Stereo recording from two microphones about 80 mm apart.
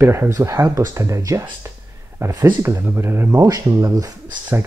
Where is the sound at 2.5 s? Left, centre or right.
Right.